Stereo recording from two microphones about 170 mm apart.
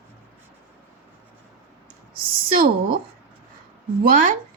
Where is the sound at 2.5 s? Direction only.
60° right (ahead or behind).